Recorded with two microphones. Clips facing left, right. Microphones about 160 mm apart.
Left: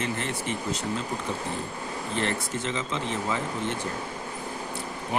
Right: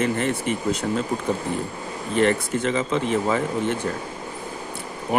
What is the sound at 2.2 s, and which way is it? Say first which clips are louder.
Speech: right 11 dB; 55° right (ahead or behind).